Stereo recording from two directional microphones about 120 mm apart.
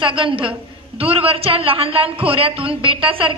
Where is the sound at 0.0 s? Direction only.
45° right (ahead or behind).